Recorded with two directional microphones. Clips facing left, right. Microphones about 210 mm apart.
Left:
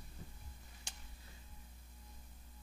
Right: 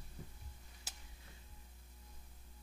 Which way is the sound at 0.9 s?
5° right (ahead or behind).